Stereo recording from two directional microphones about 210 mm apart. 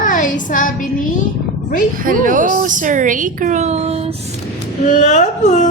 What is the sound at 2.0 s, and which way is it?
A woman's voice, 40° right (ahead or behind).